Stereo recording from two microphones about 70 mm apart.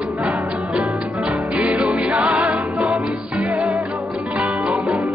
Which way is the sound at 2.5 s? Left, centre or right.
Centre.